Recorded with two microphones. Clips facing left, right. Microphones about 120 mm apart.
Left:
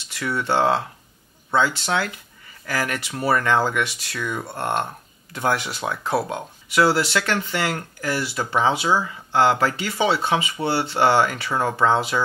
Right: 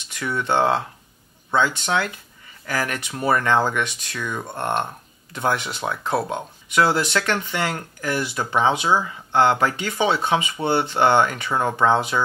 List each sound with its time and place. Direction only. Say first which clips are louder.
0.4 s speech: even; 20° right (ahead or behind)